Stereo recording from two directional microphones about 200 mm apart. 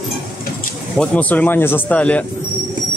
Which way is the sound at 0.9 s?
10° left (ahead or behind).